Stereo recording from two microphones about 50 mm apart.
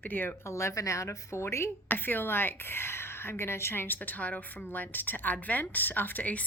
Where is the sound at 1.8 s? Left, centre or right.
Left.